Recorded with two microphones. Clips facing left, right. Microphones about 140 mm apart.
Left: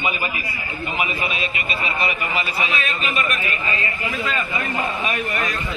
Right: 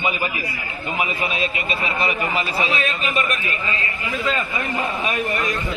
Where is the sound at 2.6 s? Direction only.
Centre (ahead or behind).